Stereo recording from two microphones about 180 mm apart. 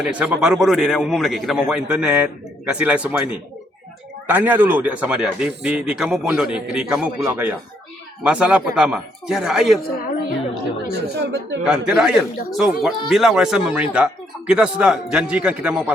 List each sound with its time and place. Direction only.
0.0 s a man's voice: 5° right (ahead or behind)
10.0 s a woman's voice: 50° left (ahead or behind)
10.9 s speech: 80° right
11.6 s a man's voice: 5° right (ahead or behind)